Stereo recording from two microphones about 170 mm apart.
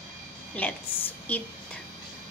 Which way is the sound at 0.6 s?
10° left (ahead or behind).